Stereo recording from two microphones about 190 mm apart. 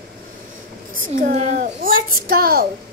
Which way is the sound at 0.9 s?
45° right (ahead or behind).